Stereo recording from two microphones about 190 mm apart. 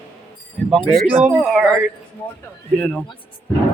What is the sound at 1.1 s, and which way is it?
Speech, 10° right (ahead or behind).